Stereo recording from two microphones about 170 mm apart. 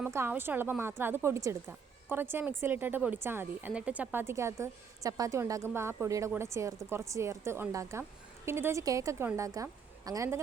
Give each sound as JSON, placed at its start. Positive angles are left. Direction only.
{"t": 0.0, "sound": "a woman's voice", "side_deg": -15}